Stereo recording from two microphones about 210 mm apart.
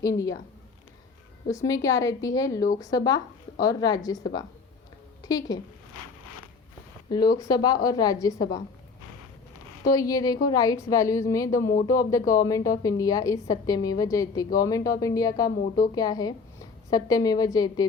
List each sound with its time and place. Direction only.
0.0 s a woman's voice: 15° left (ahead or behind)
1.5 s a woman's voice: 15° left (ahead or behind)
7.1 s a woman's voice: 20° left (ahead or behind)
9.8 s a woman's voice: 15° left (ahead or behind)